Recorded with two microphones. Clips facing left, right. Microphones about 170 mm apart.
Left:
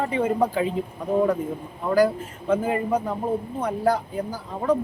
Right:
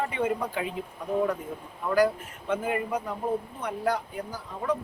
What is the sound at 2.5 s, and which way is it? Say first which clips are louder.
Speech: left 6 dB; 30° left (ahead or behind).